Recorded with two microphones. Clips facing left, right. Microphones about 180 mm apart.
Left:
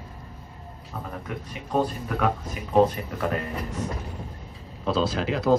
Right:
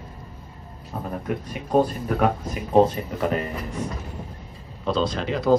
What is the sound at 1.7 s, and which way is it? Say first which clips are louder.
Speech: right 5 dB; 40° right (ahead or behind).